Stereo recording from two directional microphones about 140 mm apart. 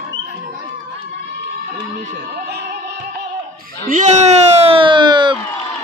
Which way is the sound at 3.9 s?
60° right (ahead or behind).